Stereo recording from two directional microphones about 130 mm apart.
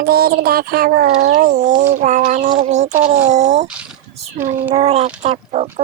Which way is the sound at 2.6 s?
60° right (ahead or behind).